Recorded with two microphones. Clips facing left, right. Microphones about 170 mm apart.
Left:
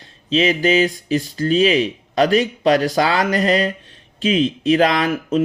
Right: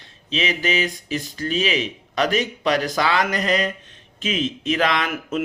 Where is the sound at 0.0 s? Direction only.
35° left (ahead or behind).